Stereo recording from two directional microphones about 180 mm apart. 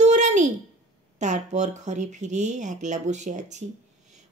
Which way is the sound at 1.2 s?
40° right (ahead or behind).